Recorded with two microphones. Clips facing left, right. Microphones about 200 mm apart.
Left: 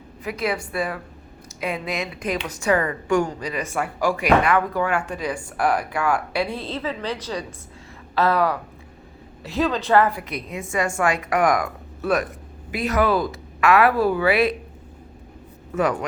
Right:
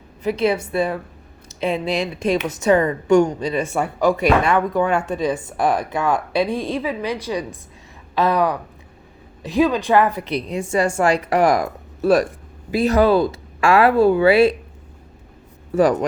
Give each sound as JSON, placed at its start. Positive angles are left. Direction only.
{"t": 0.2, "sound": "a woman's voice", "side_deg": -25}
{"t": 15.7, "sound": "speech", "side_deg": -35}